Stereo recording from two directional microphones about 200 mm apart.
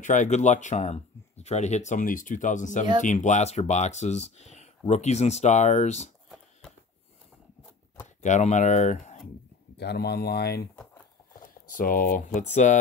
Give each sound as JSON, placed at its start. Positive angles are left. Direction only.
{"t": 0.0, "sound": "speech", "side_deg": 40}
{"t": 6.2, "sound": "a sound", "side_deg": 0}
{"t": 8.2, "sound": "speech", "side_deg": 35}
{"t": 9.8, "sound": "speech", "side_deg": 55}
{"t": 11.7, "sound": "speech", "side_deg": 45}